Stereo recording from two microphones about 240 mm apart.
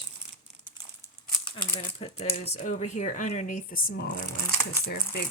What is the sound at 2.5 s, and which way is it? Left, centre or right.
Speech, left.